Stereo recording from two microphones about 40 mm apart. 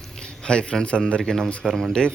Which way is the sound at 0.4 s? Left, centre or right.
Left.